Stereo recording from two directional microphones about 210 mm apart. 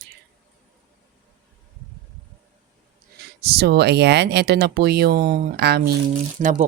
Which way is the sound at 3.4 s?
50° right (ahead or behind).